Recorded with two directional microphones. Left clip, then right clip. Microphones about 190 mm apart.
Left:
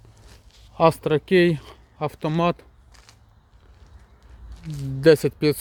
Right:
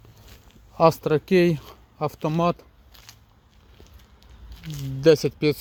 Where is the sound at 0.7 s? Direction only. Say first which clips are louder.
Even; centre (ahead or behind).